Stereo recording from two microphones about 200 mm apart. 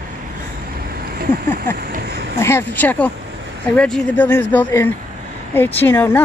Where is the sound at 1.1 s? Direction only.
50° right (ahead or behind).